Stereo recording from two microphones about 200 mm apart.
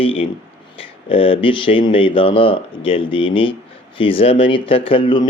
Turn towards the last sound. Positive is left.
turn(degrees=25)  # may be behind; listen again after turning